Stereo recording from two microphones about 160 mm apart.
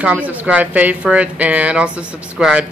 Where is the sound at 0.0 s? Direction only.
10° right (ahead or behind).